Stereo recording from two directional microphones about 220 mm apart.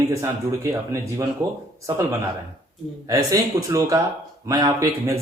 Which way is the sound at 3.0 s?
15° right (ahead or behind).